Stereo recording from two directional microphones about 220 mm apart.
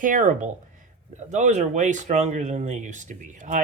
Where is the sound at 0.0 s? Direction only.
35° right (ahead or behind).